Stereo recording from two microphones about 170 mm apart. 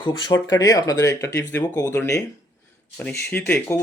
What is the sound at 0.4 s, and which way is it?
Speech, 20° left (ahead or behind).